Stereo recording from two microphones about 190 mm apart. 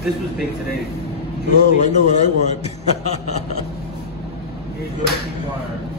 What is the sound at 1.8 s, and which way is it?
A man's voice, 40° left (ahead or behind).